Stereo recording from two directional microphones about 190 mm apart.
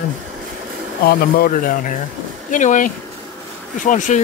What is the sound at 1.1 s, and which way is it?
Speech, 50° left (ahead or behind).